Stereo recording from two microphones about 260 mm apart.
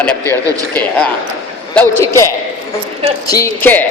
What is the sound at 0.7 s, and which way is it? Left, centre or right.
Speech, centre.